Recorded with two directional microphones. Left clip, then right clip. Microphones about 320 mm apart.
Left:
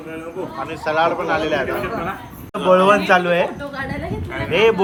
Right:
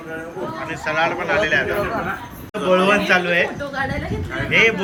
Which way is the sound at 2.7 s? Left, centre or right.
Centre.